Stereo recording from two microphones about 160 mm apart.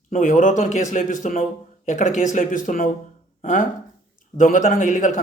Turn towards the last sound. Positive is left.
turn(degrees=55)  # may be behind; listen again after turning